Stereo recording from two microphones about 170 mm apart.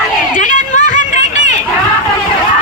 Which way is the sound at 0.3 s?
50° left (ahead or behind).